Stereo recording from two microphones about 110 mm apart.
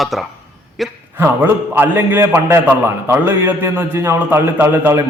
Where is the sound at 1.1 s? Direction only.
20° right (ahead or behind).